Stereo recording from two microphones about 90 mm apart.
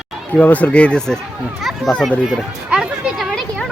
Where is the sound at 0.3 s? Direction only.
15° left (ahead or behind).